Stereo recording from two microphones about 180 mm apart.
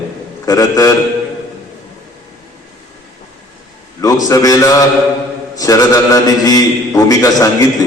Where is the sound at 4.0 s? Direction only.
20° left (ahead or behind).